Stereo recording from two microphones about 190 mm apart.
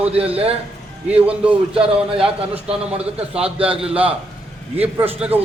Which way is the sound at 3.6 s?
5° right (ahead or behind).